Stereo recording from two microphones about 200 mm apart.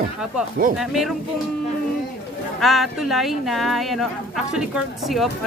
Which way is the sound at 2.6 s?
Centre (ahead or behind).